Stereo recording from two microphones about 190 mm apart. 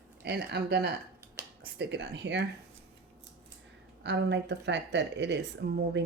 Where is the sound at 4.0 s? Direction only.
65° right (ahead or behind).